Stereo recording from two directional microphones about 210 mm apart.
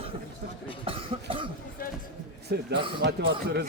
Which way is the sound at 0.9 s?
25° right (ahead or behind).